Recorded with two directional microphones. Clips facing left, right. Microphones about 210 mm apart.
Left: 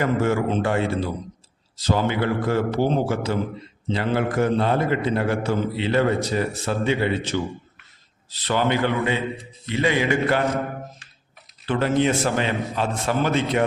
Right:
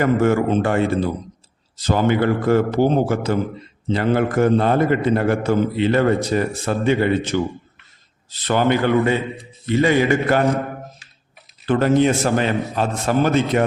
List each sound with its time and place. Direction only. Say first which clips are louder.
0.0 s a man's voice: right 4 dB; 50° right (ahead or behind)
11.6 s a man's voice: right 5 dB; 45° right (ahead or behind)